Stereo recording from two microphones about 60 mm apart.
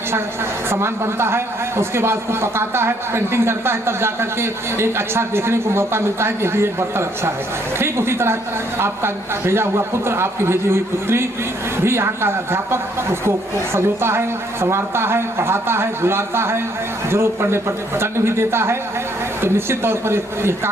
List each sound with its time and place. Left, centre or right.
0.7 s a man's voice: right